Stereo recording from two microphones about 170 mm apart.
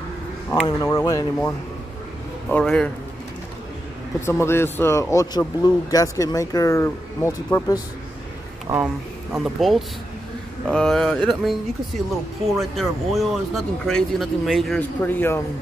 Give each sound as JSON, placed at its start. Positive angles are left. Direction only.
{"t": 0.7, "sound": "speech", "side_deg": 20}
{"t": 2.5, "sound": "speech", "side_deg": 5}
{"t": 4.3, "sound": "a man's voice", "side_deg": 15}
{"t": 8.8, "sound": "speech", "side_deg": -5}
{"t": 12.5, "sound": "speech", "side_deg": 0}